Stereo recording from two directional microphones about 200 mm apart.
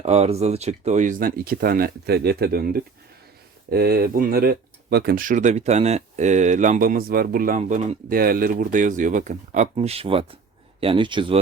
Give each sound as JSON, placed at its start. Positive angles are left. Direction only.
{"t": 0.0, "sound": "speech", "side_deg": -30}
{"t": 8.2, "sound": "speech", "side_deg": -45}